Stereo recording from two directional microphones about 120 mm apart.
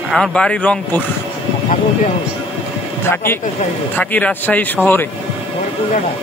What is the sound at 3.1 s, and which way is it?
Speech, 20° left (ahead or behind).